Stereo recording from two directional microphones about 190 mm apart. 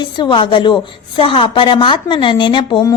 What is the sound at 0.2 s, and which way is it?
A woman's voice, 25° left (ahead or behind).